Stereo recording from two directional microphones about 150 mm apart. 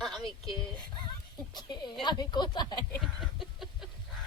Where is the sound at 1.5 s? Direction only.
30° left (ahead or behind).